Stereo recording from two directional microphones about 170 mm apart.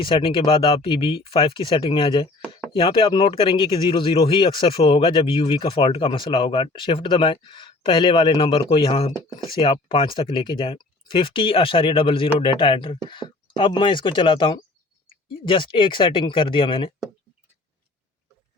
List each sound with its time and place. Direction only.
0.0 s speech: 30° left (ahead or behind)